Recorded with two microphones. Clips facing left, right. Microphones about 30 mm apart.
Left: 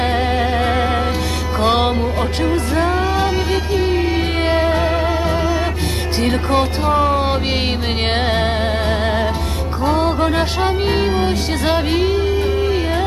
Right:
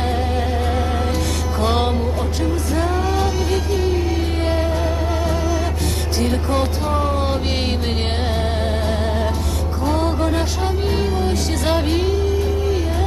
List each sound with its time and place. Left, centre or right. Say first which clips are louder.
0.0 s music: left 4 dB; left
5.1 s music: left 3 dB; left
6.5 s speech: left 4 dB; left
8.6 s music: left 3 dB; left
11.6 s music: left 3 dB; centre
12.1 s music: left 3 dB; left